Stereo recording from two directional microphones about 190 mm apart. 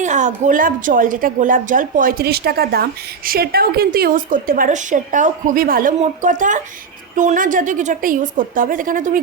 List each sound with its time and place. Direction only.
0.0 s a woman's voice: 40° right (ahead or behind)